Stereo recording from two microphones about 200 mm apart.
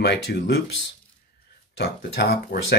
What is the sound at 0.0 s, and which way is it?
Speech, 55° left (ahead or behind).